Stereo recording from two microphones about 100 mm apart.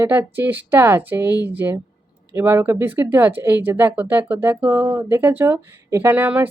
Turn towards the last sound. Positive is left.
turn(degrees=-20)  # may be behind; listen again after turning